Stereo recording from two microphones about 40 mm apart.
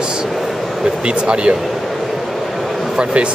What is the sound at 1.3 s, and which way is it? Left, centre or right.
Speech, right.